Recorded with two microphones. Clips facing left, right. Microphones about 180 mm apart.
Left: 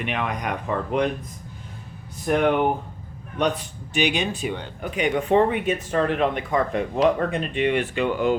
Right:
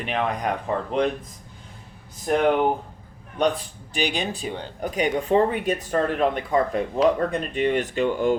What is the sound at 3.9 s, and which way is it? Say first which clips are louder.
Speech: left 3 dB; 35° right (ahead or behind).